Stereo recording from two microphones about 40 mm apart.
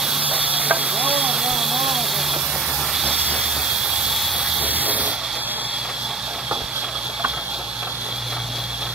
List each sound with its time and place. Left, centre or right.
0.2 s stir: right
1.3 s vehicle: centre
4.6 s a sound: right